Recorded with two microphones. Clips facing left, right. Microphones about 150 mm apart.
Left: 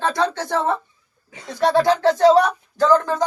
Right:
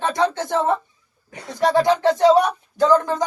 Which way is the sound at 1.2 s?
50° right (ahead or behind).